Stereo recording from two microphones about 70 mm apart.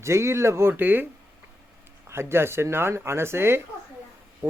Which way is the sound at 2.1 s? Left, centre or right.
Right.